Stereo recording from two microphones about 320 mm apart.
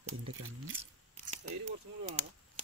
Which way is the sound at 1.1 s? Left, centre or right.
Right.